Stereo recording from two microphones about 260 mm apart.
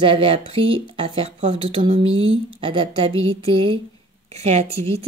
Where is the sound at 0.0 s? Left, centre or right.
Centre.